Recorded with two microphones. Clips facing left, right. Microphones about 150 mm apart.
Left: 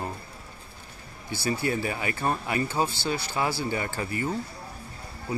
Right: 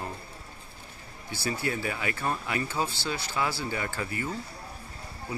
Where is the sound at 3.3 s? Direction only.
30° left (ahead or behind).